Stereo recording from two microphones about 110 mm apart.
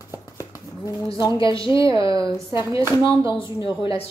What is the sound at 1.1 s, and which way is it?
Speech, 45° left (ahead or behind).